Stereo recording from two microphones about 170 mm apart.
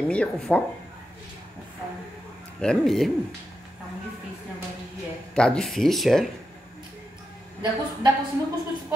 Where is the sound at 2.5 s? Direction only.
5° left (ahead or behind).